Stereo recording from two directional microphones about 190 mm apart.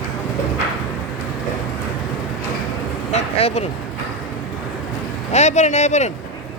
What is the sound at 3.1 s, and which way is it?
Vehicle, 35° left (ahead or behind).